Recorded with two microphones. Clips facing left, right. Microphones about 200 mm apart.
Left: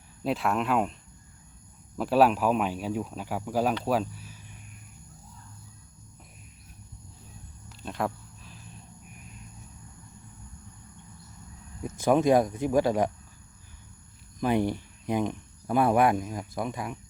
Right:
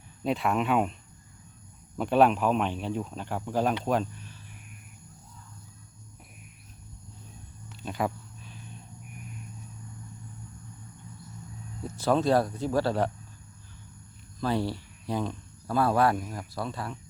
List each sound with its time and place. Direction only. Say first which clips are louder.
0.2 s speech: even; centre (ahead or behind)
2.0 s speech: even; 5° left (ahead or behind)
7.7 s a sound: right 1 dB; centre (ahead or behind)
11.8 s speech: left 2 dB; 15° left (ahead or behind)
14.3 s speech: left 3 dB; 15° left (ahead or behind)